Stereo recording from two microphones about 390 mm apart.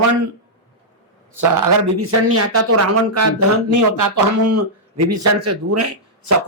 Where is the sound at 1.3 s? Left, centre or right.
Right.